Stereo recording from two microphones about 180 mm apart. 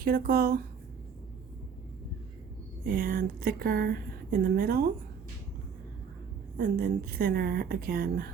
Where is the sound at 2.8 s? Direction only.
55° right (ahead or behind).